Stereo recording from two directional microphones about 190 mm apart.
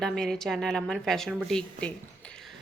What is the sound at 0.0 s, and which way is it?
A woman's voice, centre (ahead or behind).